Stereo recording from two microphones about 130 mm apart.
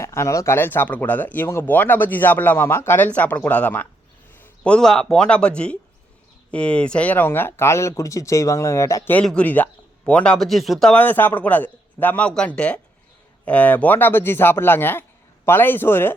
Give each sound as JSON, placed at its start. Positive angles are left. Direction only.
{"t": 0.0, "sound": "speech", "side_deg": 20}
{"t": 9.1, "sound": "speech", "side_deg": 10}